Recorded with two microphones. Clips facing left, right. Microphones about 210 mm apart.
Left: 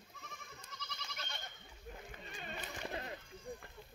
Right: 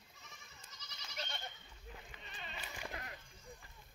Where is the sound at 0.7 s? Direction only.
60° left (ahead or behind).